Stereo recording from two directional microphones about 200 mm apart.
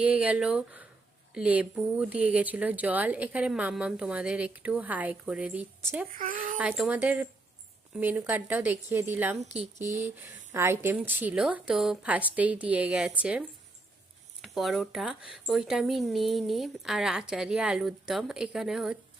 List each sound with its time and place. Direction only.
0.0 s speech: 5° right (ahead or behind)
6.1 s speech: 45° right (ahead or behind)
6.6 s a woman's voice: 5° right (ahead or behind)